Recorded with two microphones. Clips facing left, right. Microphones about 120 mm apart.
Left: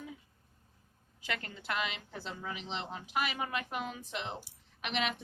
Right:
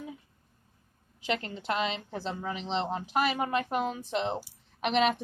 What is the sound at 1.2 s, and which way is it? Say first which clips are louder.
A woman's voice: right 8 dB; 25° right (ahead or behind).